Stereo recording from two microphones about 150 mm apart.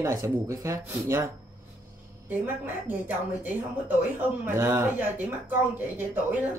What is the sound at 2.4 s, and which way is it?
Speech, 15° right (ahead or behind).